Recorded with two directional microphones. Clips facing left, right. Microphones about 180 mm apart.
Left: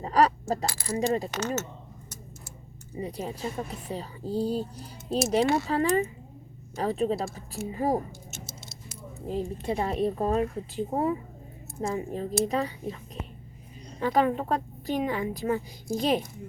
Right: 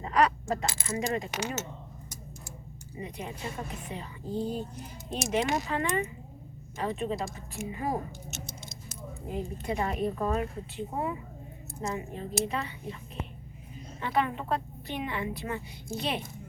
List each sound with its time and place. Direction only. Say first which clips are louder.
0.0 s coin: left 3 dB; 35° left (ahead or behind)
0.6 s coin: left 2 dB; 20° right (ahead or behind)
0.9 s speech: left 5 dB; 35° left (ahead or behind)
1.3 s speech: left 4 dB; 10° right (ahead or behind)
2.9 s speech: left 5 dB; 35° left (ahead or behind)
9.2 s speech: left 4 dB; 30° left (ahead or behind)
14.0 s speech: left 5 dB; 40° left (ahead or behind)